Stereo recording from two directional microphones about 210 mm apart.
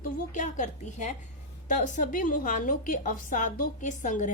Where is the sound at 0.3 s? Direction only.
35° left (ahead or behind).